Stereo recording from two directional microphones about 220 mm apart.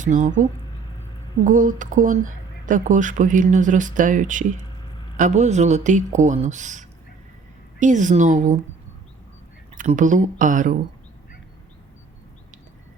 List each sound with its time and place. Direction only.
0.0 s speech: 35° right (ahead or behind)
1.5 s speech: 35° right (ahead or behind)
9.7 s speech: 35° right (ahead or behind)